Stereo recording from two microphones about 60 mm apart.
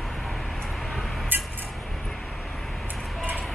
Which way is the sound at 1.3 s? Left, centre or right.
Right.